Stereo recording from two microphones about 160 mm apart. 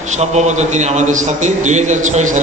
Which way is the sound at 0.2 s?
45° right (ahead or behind).